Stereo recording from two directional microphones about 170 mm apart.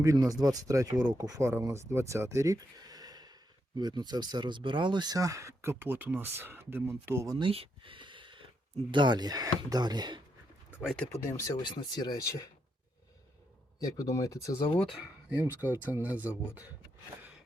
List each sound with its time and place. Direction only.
0.0 s speech: 20° right (ahead or behind)
7.3 s a sound: 30° right (ahead or behind)
8.9 s speech: 25° right (ahead or behind)
10.8 s speech: centre (ahead or behind)
11.3 s speech: 20° left (ahead or behind)
13.7 s speech: 20° left (ahead or behind)
14.8 s speech: centre (ahead or behind)